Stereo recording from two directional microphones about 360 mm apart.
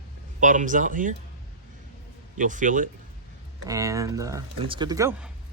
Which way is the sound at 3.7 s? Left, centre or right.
Centre.